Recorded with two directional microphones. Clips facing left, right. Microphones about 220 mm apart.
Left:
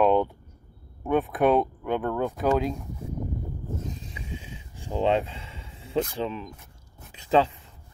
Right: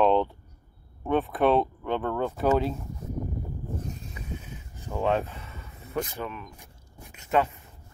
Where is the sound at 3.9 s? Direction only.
90° left.